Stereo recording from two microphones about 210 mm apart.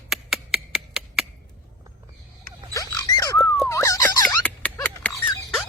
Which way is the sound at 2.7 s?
15° left (ahead or behind).